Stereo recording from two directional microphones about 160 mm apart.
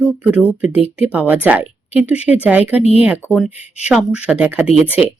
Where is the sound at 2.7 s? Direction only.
40° left (ahead or behind).